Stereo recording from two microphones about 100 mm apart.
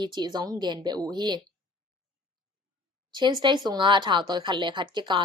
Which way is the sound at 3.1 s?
50° right (ahead or behind).